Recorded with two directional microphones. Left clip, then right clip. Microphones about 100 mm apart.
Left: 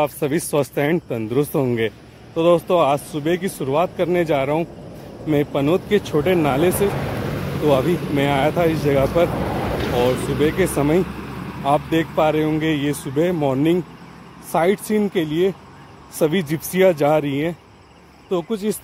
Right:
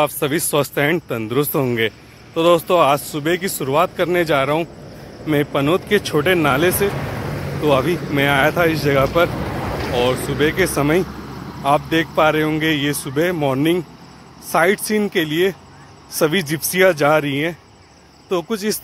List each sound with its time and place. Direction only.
0.2 s speech: 10° left (ahead or behind)
18.3 s speech: 10° left (ahead or behind)